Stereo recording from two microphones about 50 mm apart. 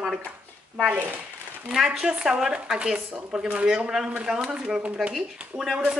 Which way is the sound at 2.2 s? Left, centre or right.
Centre.